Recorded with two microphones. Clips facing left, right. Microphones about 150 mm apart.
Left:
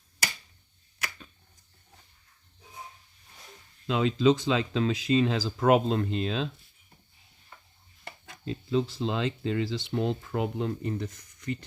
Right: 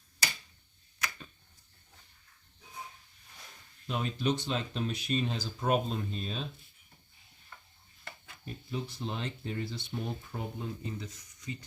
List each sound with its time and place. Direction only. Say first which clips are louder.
3.8 s speech: left 9 dB; 90° left
8.4 s speech: left 11 dB; 90° left; by 11.6 s 60° left (ahead or behind)